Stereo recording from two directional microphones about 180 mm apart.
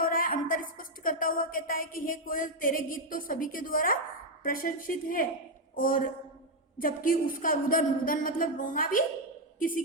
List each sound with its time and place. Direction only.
0.0 s a woman's voice: 50° left (ahead or behind)